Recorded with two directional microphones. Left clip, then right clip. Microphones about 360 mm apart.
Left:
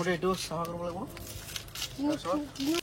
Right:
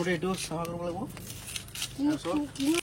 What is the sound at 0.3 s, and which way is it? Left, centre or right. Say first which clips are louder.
Speech: left 1 dB; centre.